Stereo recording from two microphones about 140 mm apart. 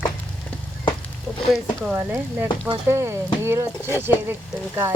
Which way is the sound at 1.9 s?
15° right (ahead or behind).